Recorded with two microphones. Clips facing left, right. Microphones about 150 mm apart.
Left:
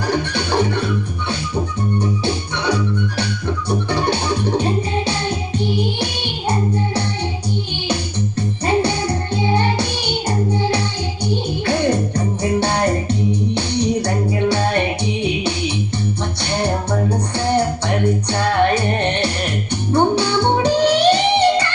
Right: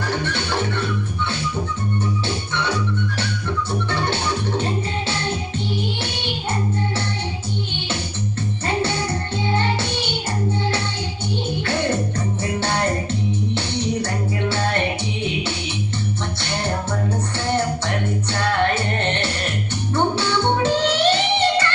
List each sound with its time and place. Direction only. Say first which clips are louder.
0.1 s music: left 6 dB; 15° left (ahead or behind)
2.0 s organ: left 5 dB; 15° left (ahead or behind)
3.7 s music: left 6 dB; 15° left (ahead or behind)
8.4 s music: left 5 dB; 15° left (ahead or behind)
11.6 s music: left 5 dB; 15° left (ahead or behind)
17.5 s music: left 4 dB; 15° left (ahead or behind)